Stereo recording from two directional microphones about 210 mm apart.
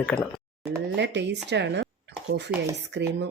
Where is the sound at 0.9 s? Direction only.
55° right (ahead or behind).